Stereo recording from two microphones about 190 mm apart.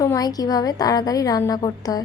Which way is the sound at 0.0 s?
20° left (ahead or behind).